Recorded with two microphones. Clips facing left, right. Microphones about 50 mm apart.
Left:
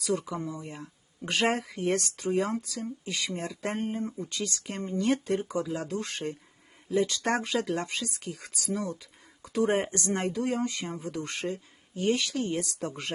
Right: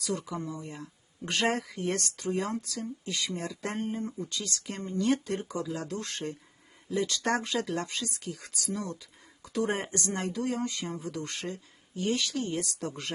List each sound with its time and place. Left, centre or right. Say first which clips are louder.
0.0 s speech: left 3 dB; left
5.1 s speech: left 3 dB; left
5.5 s speech: left 3 dB; centre
7.5 s speech: left 2 dB; left